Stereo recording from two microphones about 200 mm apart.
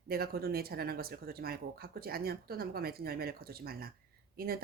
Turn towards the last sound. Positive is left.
turn(degrees=-50)  # may be behind; listen again after turning